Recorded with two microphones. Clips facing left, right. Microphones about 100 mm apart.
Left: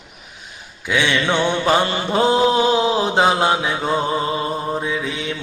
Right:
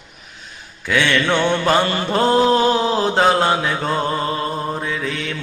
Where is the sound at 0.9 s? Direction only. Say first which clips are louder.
Right 1 dB; 15° left (ahead or behind).